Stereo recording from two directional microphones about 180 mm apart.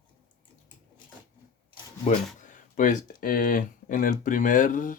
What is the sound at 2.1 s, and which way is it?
Speech, 45° left (ahead or behind).